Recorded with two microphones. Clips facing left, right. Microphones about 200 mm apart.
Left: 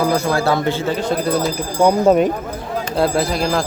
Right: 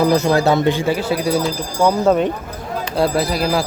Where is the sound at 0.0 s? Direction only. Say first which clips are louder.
Right 3 dB; 20° right (ahead or behind).